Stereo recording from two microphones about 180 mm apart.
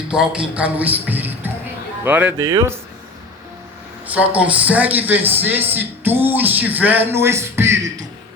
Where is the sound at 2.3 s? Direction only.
20° right (ahead or behind).